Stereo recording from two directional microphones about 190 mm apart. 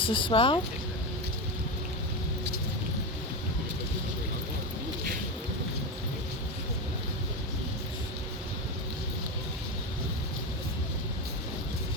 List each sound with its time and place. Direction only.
0.0 s speech: 25° left (ahead or behind)